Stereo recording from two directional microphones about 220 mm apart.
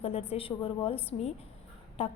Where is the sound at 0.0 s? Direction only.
25° left (ahead or behind).